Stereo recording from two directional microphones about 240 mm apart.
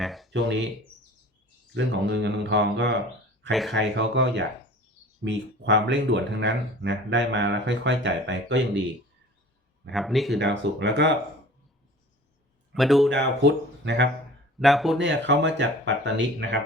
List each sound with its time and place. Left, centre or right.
0.0 s a sound: centre
0.3 s speech: right
1.7 s speech: right
3.5 s speech: centre
3.8 s speech: right
9.9 s speech: centre
10.4 s speech: right
12.7 s speech: centre
13.1 s speech: right
14.6 s speech: centre
14.9 s speech: right